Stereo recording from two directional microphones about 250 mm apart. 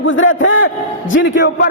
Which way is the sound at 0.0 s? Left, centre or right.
Left.